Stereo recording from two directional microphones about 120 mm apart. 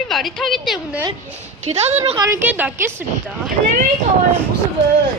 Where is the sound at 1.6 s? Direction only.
65° right (ahead or behind).